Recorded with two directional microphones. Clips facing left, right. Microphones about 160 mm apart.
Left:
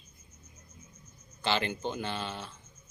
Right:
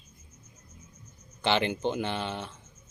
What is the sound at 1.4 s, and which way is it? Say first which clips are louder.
Speech: right 4 dB; 20° right (ahead or behind).